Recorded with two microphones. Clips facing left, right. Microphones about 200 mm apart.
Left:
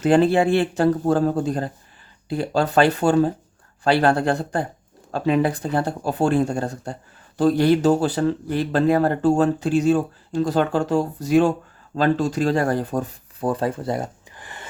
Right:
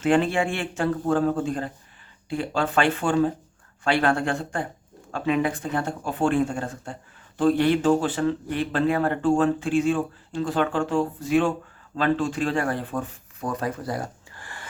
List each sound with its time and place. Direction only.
0.0 s speech: 35° left (ahead or behind); by 14.7 s 20° left (ahead or behind)